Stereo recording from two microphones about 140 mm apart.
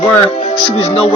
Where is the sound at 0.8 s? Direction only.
45° left (ahead or behind).